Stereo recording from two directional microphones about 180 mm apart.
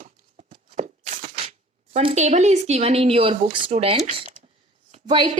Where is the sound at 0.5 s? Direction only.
40° right (ahead or behind).